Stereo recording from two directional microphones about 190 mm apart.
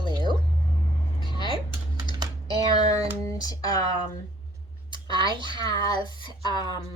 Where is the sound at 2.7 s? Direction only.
20° left (ahead or behind).